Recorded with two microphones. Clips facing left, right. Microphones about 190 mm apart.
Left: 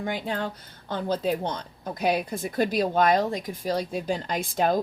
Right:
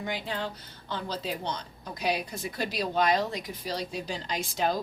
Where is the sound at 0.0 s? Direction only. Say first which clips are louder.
Left 4 dB; 50° left (ahead or behind).